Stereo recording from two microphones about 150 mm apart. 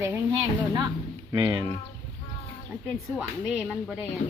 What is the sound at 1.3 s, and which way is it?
Speech, 30° right (ahead or behind).